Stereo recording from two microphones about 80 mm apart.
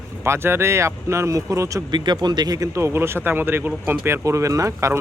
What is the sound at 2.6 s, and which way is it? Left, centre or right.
Speech, right.